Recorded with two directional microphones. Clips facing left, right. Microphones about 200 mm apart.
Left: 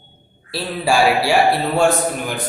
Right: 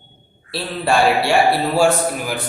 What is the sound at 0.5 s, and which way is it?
A man's voice, 5° left (ahead or behind).